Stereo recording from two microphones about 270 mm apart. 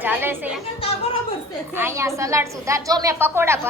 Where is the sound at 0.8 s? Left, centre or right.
Left.